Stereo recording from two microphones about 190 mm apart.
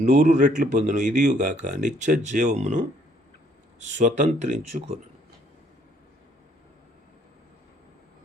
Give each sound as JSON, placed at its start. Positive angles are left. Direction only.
{"t": 0.0, "sound": "speech", "side_deg": -40}